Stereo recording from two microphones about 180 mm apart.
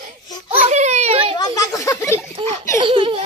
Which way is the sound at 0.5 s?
35° right (ahead or behind).